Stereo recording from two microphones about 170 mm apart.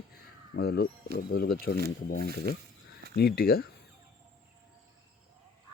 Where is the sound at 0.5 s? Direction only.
65° left (ahead or behind).